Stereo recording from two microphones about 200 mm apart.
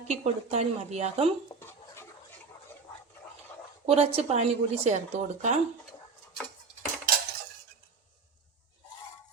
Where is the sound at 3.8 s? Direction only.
30° right (ahead or behind).